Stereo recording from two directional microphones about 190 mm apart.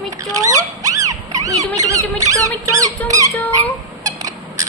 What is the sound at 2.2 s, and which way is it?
Rodents, 15° right (ahead or behind).